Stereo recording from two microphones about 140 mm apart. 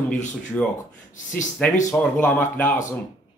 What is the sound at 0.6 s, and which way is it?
Speech, 10° left (ahead or behind).